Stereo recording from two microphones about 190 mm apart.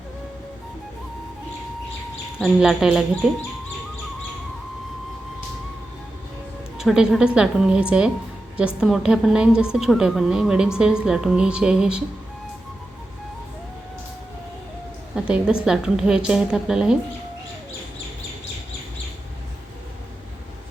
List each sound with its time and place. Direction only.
2.4 s a woman's voice: 5° right (ahead or behind)
6.7 s a woman's voice: 5° right (ahead or behind)
15.1 s a woman's voice: 5° right (ahead or behind)